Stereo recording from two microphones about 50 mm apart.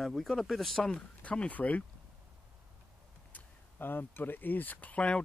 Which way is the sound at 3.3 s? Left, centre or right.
Left.